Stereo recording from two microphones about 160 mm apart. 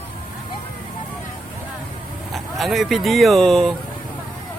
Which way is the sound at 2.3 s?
Centre (ahead or behind).